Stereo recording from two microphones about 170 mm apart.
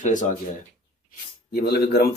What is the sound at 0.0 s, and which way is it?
Speech, 50° left (ahead or behind).